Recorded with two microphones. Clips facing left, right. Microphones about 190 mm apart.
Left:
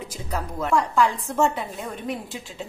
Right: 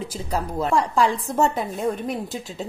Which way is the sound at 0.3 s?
30° right (ahead or behind).